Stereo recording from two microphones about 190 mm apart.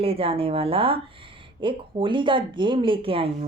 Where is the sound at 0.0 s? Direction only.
30° right (ahead or behind).